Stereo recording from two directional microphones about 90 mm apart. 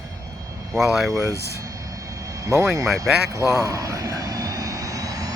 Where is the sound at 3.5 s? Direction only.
35° right (ahead or behind).